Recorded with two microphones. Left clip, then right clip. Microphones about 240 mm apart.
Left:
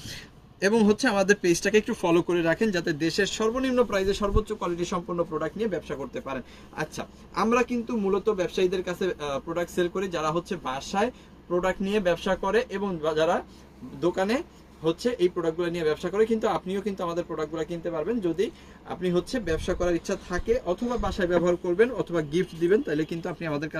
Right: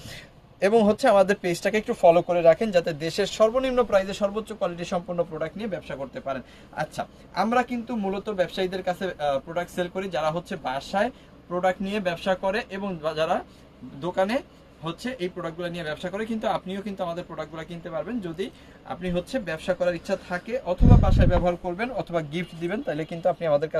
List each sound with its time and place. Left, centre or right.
0.6 s speech: right
2.6 s a man's voice: right; by 17.7 s centre
18.9 s speech: centre